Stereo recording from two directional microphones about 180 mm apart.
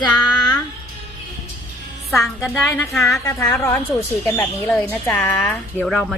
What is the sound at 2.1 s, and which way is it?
A woman's voice, 15° left (ahead or behind).